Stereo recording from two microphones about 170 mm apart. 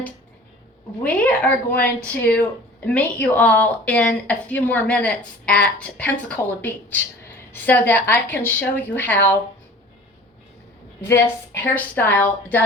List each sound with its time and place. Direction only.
1.0 s speech: 10° left (ahead or behind)
11.0 s speech: 15° left (ahead or behind)